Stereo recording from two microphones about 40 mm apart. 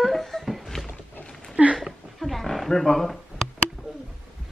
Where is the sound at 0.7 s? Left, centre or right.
Centre.